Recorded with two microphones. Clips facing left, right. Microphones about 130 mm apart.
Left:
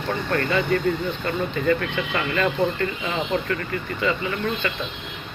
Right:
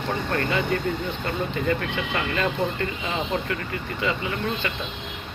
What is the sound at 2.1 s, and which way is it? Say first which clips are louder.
Speech: left 2 dB; 25° right (ahead or behind).